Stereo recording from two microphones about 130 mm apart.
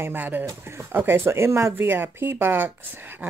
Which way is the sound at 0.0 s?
15° right (ahead or behind).